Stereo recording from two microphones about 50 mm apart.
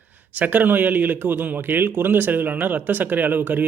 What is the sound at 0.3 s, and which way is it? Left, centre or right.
A man's voice, right.